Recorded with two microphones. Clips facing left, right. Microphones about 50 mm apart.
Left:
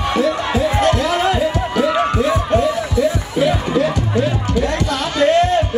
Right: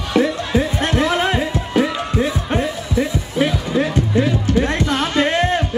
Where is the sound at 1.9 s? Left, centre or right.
Left.